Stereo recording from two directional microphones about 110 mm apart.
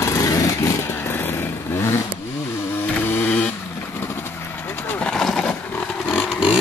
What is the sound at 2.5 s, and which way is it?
Chainsaw, 20° left (ahead or behind).